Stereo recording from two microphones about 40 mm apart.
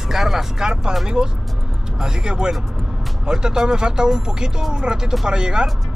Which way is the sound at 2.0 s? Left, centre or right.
Centre.